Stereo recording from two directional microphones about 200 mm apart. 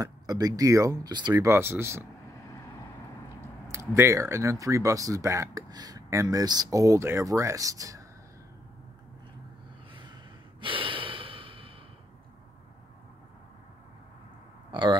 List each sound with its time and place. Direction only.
0.0 s speech: 20° right (ahead or behind)
3.7 s speech: 15° right (ahead or behind)
10.6 s breathing: 25° right (ahead or behind)
14.7 s speech: 25° right (ahead or behind)